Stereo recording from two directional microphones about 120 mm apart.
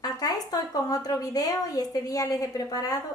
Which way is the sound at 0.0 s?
30° left (ahead or behind).